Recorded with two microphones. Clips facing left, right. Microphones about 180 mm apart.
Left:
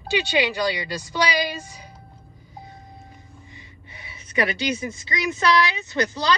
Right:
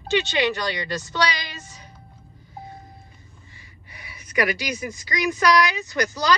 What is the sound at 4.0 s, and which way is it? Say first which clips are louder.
A woman's voice: even; 25° left (ahead or behind).